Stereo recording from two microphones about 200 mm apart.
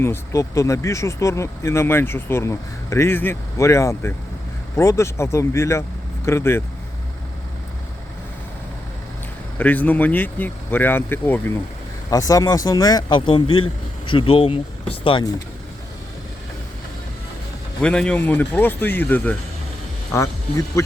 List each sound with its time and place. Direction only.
0.0 s speech: 15° left (ahead or behind)
9.6 s speech: 10° left (ahead or behind); by 15.3 s 25° left (ahead or behind)
17.7 s speech: 5° left (ahead or behind)